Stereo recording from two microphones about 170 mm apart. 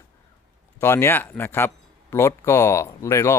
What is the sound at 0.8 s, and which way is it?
Speech, 15° left (ahead or behind).